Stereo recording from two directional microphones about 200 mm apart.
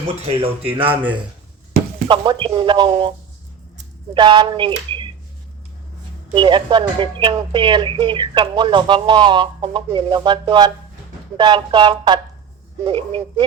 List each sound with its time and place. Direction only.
0.2 s speech: 30° right (ahead or behind)
2.0 s speech: 25° right (ahead or behind)
4.1 s speech: 25° right (ahead or behind)
6.2 s speech: 25° right (ahead or behind)